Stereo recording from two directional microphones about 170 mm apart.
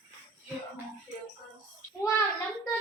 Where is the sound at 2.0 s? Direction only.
20° left (ahead or behind).